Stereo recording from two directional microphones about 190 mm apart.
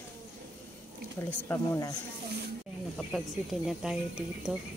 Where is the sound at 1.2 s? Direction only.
10° left (ahead or behind).